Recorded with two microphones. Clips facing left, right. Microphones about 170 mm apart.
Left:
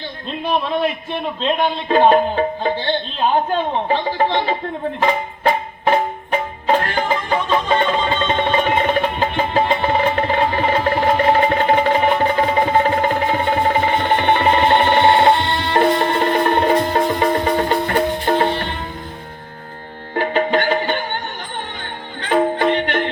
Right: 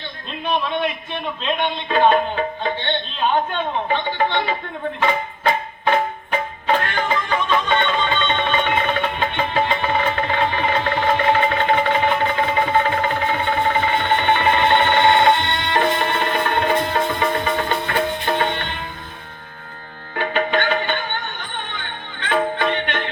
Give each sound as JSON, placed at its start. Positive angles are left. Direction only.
{"t": 0.3, "sound": "a man's voice", "side_deg": 35}
{"t": 4.9, "sound": "banjo", "side_deg": 35}
{"t": 20.1, "sound": "music", "side_deg": 35}